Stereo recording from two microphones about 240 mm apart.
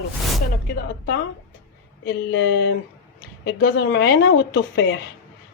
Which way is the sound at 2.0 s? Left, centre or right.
Left.